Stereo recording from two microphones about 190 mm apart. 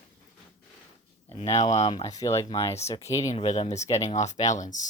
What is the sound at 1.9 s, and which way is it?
Speech, 20° left (ahead or behind).